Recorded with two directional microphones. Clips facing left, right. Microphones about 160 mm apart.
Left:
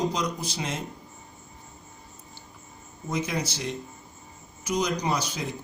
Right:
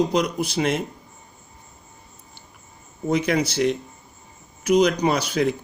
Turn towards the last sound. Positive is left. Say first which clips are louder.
# right 8 dB
turn(degrees=-65)  # may be behind; listen again after turning